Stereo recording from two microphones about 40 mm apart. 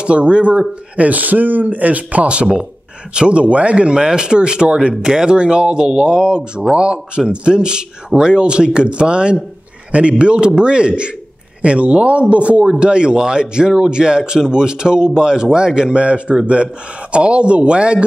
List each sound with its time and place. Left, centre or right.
0.0 s a man's voice: right